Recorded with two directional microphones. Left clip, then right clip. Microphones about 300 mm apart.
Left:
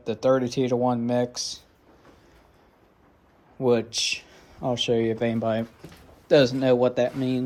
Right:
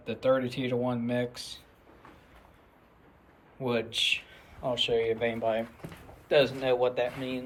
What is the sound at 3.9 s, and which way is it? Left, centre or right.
Speech, centre.